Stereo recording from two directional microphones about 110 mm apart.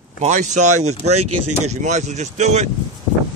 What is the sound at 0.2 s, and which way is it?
Speech, 90° right.